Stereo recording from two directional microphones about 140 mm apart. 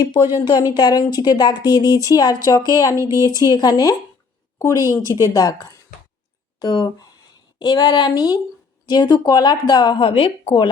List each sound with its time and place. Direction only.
0.5 s speech: 25° left (ahead or behind)
1.9 s speech: 20° right (ahead or behind)
2.1 s speech: 25° left (ahead or behind)
3.0 s speech: 20° right (ahead or behind)
3.5 s speech: 25° left (ahead or behind)
4.9 s speech: 20° right (ahead or behind)
5.2 s speech: 25° left (ahead or behind)